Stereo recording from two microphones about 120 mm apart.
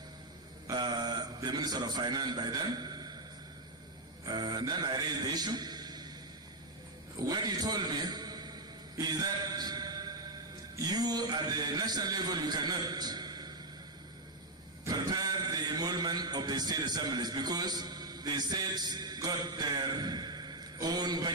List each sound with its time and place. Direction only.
0.7 s a man's voice: 35° right (ahead or behind)
4.3 s a man's voice: 35° right (ahead or behind)
7.3 s a man's voice: 35° right (ahead or behind)
9.0 s music: 35° right (ahead or behind)
10.8 s a man's voice: 35° right (ahead or behind)
14.8 s a man's voice: 35° right (ahead or behind)